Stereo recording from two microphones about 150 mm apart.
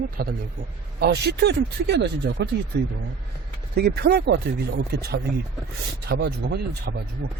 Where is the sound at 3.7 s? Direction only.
90° right.